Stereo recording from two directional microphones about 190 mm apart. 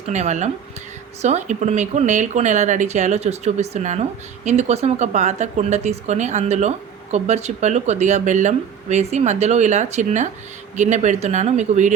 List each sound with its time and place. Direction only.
0.1 s speech: 35° right (ahead or behind)